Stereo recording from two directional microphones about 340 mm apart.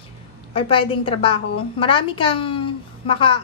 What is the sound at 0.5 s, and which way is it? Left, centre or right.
A woman's voice, centre.